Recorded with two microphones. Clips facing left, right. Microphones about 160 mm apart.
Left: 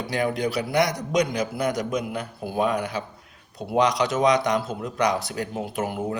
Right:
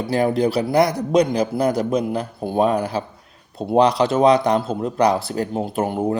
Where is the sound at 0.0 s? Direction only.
30° right (ahead or behind).